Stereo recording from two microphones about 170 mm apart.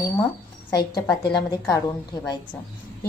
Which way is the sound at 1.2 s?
25° left (ahead or behind).